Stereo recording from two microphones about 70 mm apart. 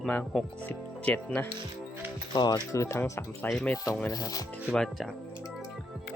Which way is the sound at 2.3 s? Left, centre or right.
Left.